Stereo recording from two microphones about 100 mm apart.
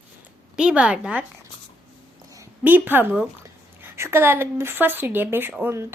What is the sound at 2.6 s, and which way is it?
A woman's voice, 20° right (ahead or behind).